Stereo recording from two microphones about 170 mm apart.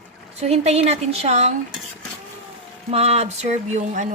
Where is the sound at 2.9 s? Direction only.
40° right (ahead or behind).